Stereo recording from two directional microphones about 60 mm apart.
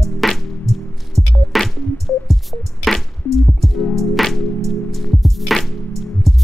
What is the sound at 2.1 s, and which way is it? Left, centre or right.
Music, left.